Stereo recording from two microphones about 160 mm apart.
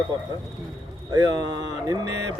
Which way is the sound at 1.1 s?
25° right (ahead or behind).